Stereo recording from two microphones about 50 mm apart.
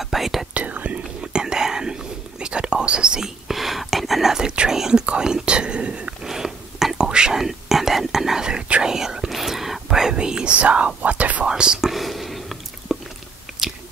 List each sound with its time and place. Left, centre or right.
0.0 s whispering: centre
0.6 s whispering: right
3.4 s whispering: centre; by 6.1 s right
6.2 s whispering: centre
8.5 s whispering: right
10.5 s speech: right
11.0 s whispering: right
11.4 s whispering: centre
11.9 s a sound: centre
13.5 s chewing: centre